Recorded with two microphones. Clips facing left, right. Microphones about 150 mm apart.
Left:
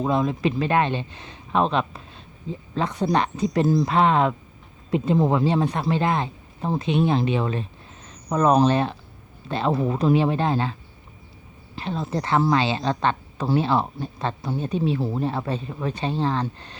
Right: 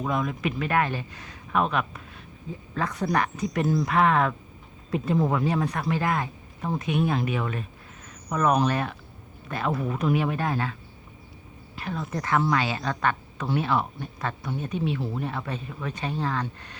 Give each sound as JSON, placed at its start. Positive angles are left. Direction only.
{"t": 0.0, "sound": "speech", "side_deg": 30}
{"t": 11.8, "sound": "speech", "side_deg": 25}